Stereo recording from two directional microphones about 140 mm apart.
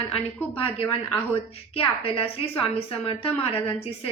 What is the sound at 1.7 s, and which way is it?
A woman's voice, 40° left (ahead or behind).